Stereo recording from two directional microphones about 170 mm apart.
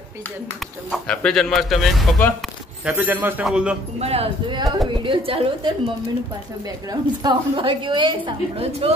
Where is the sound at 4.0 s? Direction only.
35° right (ahead or behind).